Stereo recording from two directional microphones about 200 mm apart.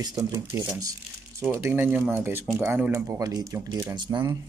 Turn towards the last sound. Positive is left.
turn(degrees=-20)  # may be behind; listen again after turning